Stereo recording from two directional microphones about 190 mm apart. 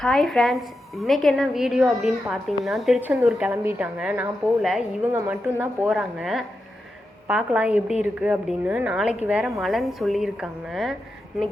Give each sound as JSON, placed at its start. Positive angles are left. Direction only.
{"t": 0.0, "sound": "a woman's voice", "side_deg": 0}